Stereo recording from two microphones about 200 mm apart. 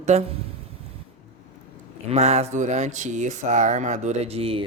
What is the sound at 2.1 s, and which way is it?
Speech, 30° right (ahead or behind).